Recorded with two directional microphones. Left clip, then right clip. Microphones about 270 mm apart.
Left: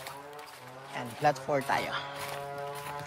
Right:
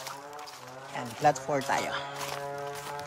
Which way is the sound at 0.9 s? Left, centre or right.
Centre.